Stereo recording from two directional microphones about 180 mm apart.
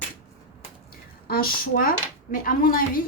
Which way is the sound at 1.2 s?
55° left (ahead or behind).